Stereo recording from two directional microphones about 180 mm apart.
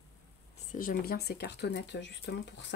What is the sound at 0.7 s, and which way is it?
Speech, 50° left (ahead or behind).